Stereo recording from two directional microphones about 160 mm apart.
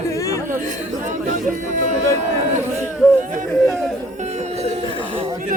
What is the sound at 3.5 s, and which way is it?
Chatter, centre (ahead or behind).